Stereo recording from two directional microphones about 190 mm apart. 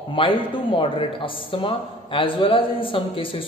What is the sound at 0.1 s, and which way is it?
Speech, 25° left (ahead or behind).